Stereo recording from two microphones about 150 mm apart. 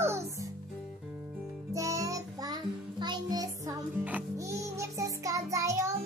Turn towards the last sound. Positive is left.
turn(degrees=-20)  # may be behind; listen again after turning